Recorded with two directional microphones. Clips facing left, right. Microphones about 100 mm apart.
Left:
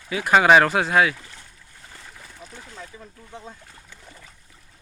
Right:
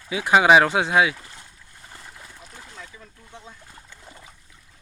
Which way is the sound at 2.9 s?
30° left (ahead or behind).